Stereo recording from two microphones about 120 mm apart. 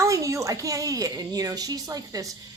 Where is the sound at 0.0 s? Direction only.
25° right (ahead or behind).